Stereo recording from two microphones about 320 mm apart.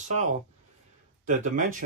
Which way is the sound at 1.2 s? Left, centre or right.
Right.